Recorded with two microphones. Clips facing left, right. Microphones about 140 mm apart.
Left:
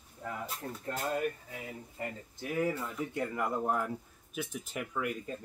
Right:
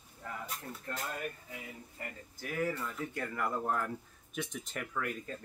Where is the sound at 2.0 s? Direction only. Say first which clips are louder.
Left 5 dB; 25° left (ahead or behind).